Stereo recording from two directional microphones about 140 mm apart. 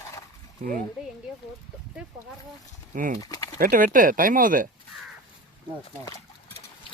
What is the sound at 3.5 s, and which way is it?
Speech, 90° right.